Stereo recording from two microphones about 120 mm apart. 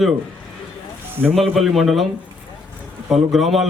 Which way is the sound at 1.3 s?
Centre (ahead or behind).